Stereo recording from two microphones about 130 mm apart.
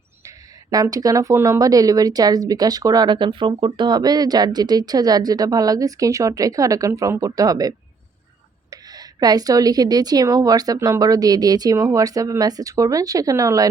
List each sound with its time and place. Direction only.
0.3 s speech: 30° right (ahead or behind)
8.7 s speech: 30° right (ahead or behind)